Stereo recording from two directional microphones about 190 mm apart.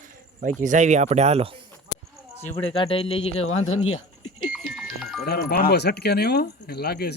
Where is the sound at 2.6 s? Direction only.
30° left (ahead or behind).